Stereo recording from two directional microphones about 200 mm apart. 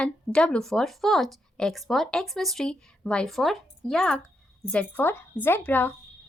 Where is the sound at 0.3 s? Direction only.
5° left (ahead or behind).